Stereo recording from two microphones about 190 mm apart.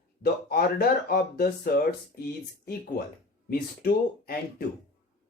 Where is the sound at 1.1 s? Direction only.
50° left (ahead or behind).